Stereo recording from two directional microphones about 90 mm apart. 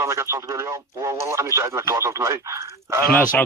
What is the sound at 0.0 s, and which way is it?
Speech, 30° right (ahead or behind).